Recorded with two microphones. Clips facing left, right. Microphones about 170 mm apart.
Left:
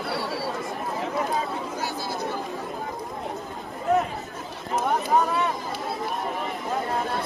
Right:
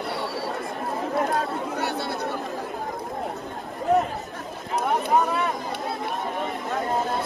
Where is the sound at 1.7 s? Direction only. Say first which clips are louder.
Right 3 dB; 65° right (ahead or behind).